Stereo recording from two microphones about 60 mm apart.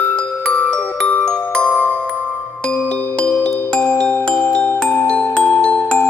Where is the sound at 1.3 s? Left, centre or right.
Centre.